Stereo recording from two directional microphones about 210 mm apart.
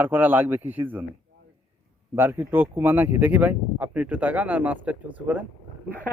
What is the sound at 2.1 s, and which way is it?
Speech, 10° right (ahead or behind).